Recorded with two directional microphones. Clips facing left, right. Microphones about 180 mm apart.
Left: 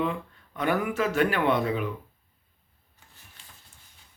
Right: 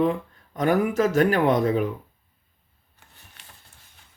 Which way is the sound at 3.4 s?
70° right (ahead or behind).